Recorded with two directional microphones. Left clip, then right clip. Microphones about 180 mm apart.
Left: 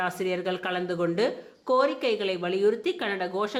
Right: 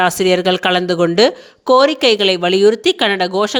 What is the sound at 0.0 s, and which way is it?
Speech, 50° right (ahead or behind).